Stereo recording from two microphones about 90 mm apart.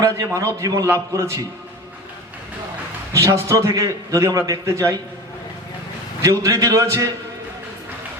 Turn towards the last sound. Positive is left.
turn(degrees=-35)  # may be behind; listen again after turning